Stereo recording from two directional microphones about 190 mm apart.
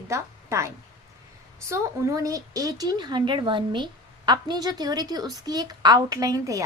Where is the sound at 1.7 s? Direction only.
15° right (ahead or behind).